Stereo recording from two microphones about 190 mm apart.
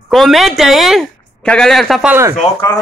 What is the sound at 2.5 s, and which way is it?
Speech, 20° left (ahead or behind).